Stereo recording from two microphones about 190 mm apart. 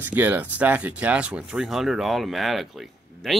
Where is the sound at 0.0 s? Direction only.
10° right (ahead or behind).